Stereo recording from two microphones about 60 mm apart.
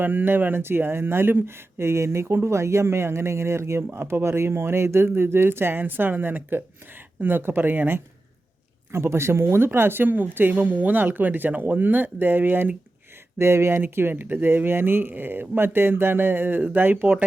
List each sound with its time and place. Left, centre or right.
0.0 s speech: right
8.9 s speech: right
13.4 s speech: right